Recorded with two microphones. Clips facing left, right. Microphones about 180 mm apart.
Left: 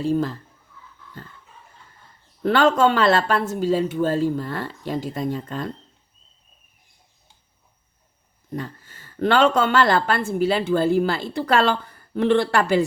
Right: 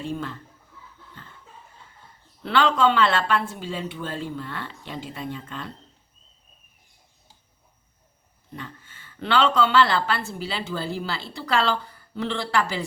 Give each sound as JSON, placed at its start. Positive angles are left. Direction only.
{"t": 0.0, "sound": "speech", "side_deg": 35}
{"t": 2.4, "sound": "speech", "side_deg": 45}
{"t": 8.5, "sound": "a woman's voice", "side_deg": 40}